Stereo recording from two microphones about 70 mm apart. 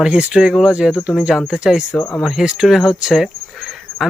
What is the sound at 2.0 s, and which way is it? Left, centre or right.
Speech, left.